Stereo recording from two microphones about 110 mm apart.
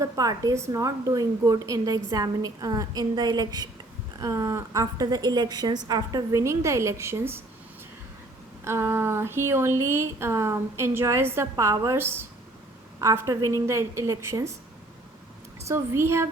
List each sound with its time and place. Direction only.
0.0 s a woman's voice: 30° right (ahead or behind)
8.6 s a woman's voice: 25° right (ahead or behind)
11.5 s a woman's voice: 30° right (ahead or behind)
15.6 s a woman's voice: 25° right (ahead or behind)